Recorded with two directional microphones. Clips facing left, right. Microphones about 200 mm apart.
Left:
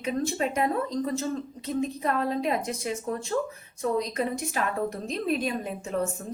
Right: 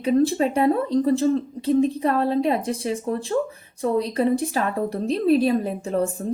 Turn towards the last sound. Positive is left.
turn(degrees=-35)  # may be behind; listen again after turning